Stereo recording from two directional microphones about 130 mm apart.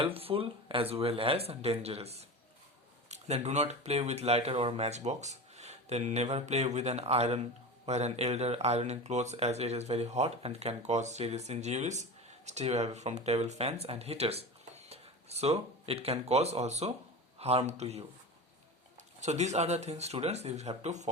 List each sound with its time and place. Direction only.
0.0 s speech: 45° right (ahead or behind)